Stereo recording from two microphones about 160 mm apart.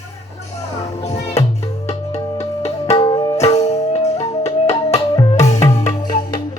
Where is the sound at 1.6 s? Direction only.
40° left (ahead or behind).